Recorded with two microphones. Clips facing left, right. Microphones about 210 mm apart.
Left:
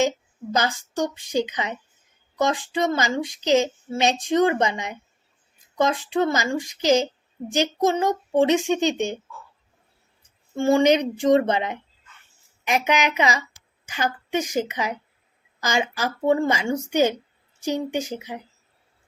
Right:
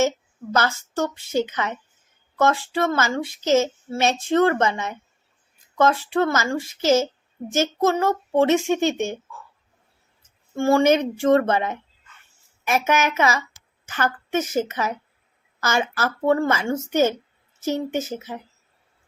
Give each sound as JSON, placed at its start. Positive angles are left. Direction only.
{"t": 0.5, "sound": "speech", "side_deg": 15}
{"t": 10.2, "sound": "speech", "side_deg": 20}